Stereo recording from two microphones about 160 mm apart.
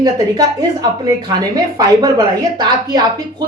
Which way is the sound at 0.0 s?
25° right (ahead or behind).